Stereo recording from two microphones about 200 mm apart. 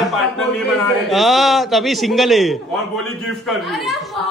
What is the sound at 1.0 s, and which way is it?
A woman's voice, centre (ahead or behind).